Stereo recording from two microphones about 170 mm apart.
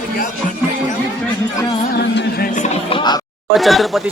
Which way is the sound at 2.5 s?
40° left (ahead or behind).